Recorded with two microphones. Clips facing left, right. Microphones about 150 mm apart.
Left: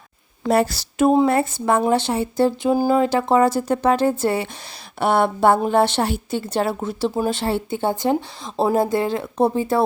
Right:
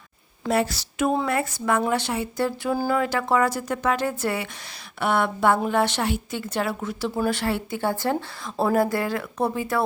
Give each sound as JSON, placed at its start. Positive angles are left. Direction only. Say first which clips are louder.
{"t": 0.4, "sound": "a woman's voice", "louder": "left 5 dB", "side_deg": 40}